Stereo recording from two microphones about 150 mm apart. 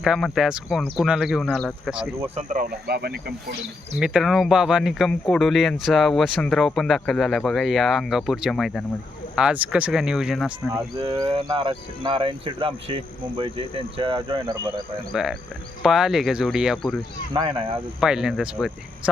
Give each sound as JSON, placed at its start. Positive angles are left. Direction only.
{"t": 0.0, "sound": "speech", "side_deg": 0}
{"t": 2.4, "sound": "speech", "side_deg": -60}
{"t": 4.0, "sound": "speech", "side_deg": -5}
{"t": 10.7, "sound": "speech", "side_deg": -20}
{"t": 11.5, "sound": "speech", "side_deg": -35}
{"t": 15.1, "sound": "speech", "side_deg": 0}
{"t": 17.3, "sound": "speech", "side_deg": -35}
{"t": 18.0, "sound": "speech", "side_deg": -5}